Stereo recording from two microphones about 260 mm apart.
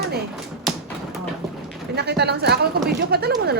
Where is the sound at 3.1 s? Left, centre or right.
Right.